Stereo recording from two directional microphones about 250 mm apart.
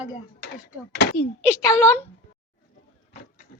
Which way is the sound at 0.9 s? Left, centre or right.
Left.